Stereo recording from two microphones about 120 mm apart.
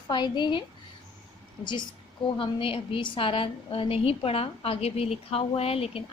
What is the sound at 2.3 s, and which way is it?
A woman's voice, 45° left (ahead or behind).